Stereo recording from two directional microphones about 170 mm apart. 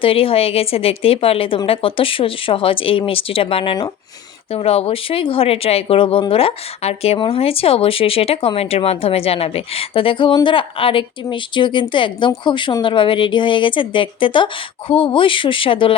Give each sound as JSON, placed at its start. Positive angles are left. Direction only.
{"t": 0.0, "sound": "speech", "side_deg": 35}